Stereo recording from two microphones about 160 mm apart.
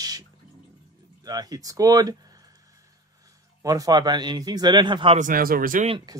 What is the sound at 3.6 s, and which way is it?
Speech, 20° right (ahead or behind).